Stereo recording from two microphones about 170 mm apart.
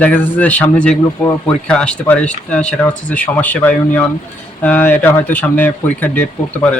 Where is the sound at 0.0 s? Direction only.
10° left (ahead or behind).